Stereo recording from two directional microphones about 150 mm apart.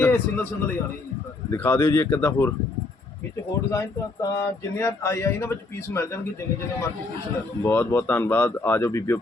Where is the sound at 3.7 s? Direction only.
20° left (ahead or behind).